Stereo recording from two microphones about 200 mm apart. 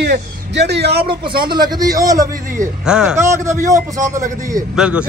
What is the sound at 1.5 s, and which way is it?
Speech, 20° right (ahead or behind).